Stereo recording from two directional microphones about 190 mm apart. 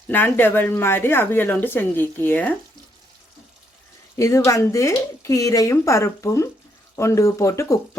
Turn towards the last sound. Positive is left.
turn(degrees=15)  # may be behind; listen again after turning